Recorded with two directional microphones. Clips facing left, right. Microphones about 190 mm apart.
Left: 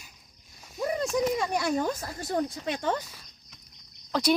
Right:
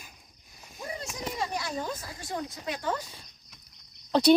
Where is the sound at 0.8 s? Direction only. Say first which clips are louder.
Left 11 dB; 55° left (ahead or behind).